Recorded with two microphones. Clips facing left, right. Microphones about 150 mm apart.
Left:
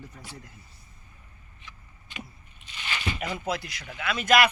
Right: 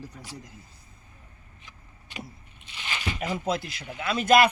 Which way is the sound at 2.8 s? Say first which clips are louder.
Even; 15° right (ahead or behind).